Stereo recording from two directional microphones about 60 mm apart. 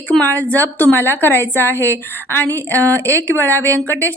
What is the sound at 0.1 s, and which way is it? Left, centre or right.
A woman's voice, left.